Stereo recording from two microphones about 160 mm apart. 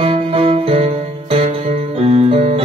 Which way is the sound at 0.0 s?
35° right (ahead or behind).